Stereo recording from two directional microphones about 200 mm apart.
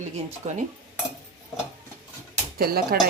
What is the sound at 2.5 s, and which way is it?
Speech, 50° right (ahead or behind).